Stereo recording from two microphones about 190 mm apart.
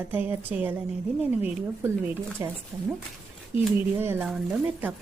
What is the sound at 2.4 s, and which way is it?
Speech, 15° right (ahead or behind).